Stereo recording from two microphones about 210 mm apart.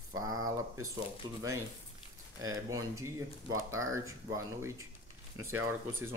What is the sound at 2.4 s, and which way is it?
Speech, 15° right (ahead or behind).